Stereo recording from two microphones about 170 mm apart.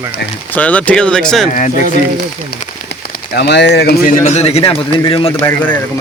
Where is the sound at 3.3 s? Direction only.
85° left.